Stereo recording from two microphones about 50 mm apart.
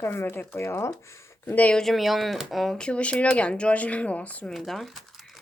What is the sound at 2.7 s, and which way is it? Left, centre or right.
Speech, centre.